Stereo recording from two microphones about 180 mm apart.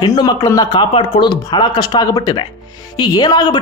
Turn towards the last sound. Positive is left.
turn(degrees=25)  # may be behind; listen again after turning